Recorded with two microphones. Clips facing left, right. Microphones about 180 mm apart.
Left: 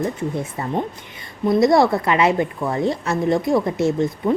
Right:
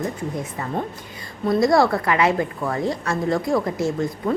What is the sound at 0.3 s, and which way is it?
A woman's voice, 30° left (ahead or behind).